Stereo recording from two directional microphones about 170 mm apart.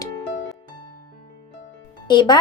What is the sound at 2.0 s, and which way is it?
Speech, 25° left (ahead or behind).